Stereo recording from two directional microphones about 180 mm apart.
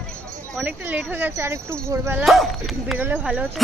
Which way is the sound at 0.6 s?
10° right (ahead or behind).